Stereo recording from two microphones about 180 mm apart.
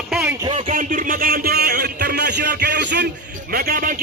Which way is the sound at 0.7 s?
45° right (ahead or behind).